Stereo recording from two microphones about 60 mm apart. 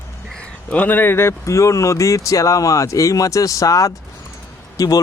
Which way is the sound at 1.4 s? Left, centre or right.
Left.